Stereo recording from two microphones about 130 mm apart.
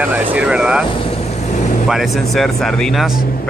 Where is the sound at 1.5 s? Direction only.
70° left (ahead or behind).